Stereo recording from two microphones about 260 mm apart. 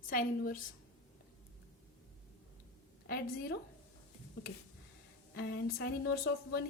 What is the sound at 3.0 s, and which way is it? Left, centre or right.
Speech, left.